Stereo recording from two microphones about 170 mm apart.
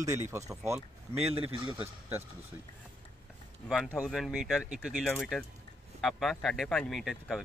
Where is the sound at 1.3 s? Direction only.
30° right (ahead or behind).